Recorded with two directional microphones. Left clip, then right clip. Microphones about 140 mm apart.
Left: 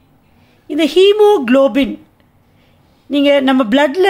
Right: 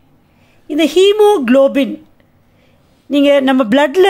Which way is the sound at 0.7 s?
15° right (ahead or behind).